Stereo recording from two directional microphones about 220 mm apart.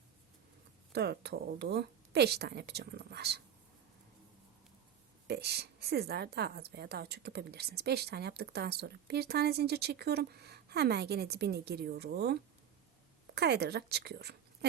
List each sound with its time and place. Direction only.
0.9 s a woman's voice: 50° right (ahead or behind)
5.3 s a woman's voice: 50° right (ahead or behind)